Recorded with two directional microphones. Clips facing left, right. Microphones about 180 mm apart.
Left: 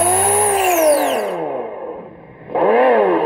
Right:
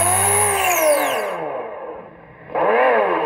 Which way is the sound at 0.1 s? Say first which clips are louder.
Left 4 dB; 45° left (ahead or behind).